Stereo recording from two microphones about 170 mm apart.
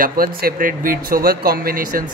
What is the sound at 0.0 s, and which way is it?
A man's voice, 60° right (ahead or behind).